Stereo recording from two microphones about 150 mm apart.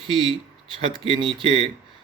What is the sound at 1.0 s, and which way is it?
Speech, 35° right (ahead or behind).